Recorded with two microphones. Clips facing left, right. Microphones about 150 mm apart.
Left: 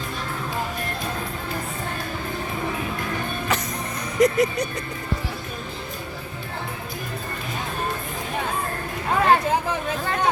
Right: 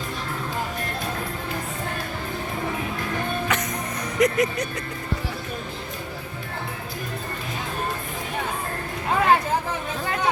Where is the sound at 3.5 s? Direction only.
35° left (ahead or behind).